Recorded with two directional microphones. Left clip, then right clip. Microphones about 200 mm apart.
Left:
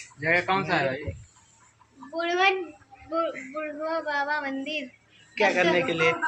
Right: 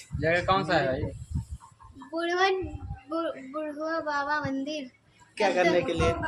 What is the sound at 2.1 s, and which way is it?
Speech, 15° right (ahead or behind).